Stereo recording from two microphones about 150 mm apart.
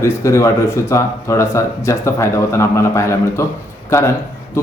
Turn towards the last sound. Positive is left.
turn(degrees=20)  # may be behind; listen again after turning